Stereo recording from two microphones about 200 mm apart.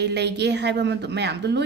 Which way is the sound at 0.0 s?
60° right (ahead or behind).